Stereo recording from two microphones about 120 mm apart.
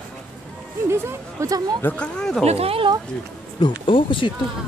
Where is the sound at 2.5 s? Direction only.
55° right (ahead or behind).